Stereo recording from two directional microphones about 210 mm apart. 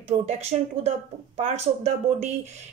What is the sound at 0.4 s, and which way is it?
Speech, 30° right (ahead or behind).